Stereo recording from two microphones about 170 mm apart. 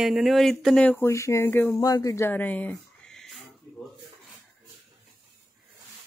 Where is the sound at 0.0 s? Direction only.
Centre (ahead or behind).